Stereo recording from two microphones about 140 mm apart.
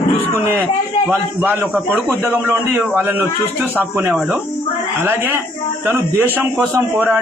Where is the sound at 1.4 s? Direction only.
10° right (ahead or behind).